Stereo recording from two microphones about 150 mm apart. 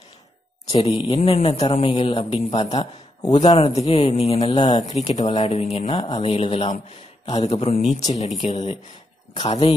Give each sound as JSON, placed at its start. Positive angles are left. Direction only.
{"t": 0.8, "sound": "a man's voice", "side_deg": 35}
{"t": 2.5, "sound": "a man's voice", "side_deg": 30}
{"t": 3.3, "sound": "speech", "side_deg": 50}
{"t": 4.6, "sound": "speech", "side_deg": 25}
{"t": 4.9, "sound": "a man's voice", "side_deg": 50}
{"t": 5.9, "sound": "a man's voice", "side_deg": 30}
{"t": 9.3, "sound": "speech", "side_deg": 30}